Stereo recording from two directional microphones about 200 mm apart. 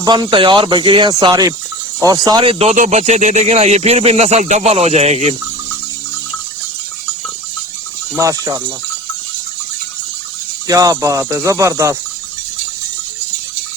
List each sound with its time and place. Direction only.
0.0 s speech: 20° right (ahead or behind)
8.1 s speech: 15° right (ahead or behind)
10.7 s speech: 15° right (ahead or behind)